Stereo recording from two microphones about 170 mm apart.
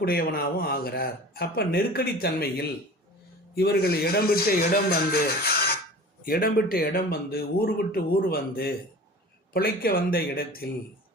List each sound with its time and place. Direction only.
0.0 s speech: 65° left (ahead or behind)